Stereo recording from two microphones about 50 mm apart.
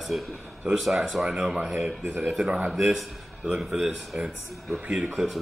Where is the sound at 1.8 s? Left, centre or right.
Right.